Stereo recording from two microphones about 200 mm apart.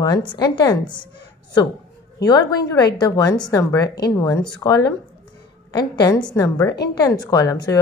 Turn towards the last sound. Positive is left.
turn(degrees=20)  # may be behind; listen again after turning